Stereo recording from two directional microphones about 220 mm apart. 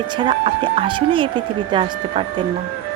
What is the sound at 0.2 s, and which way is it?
Speech, 20° right (ahead or behind).